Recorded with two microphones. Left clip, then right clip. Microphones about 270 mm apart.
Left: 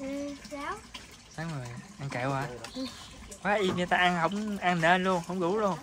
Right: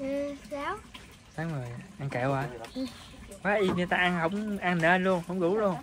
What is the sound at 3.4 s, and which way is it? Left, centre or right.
Speech, centre.